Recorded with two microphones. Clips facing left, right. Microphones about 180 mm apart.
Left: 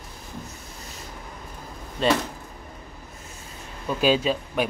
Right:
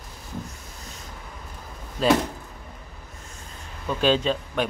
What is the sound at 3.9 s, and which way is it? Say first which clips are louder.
Speech: even; 10° left (ahead or behind).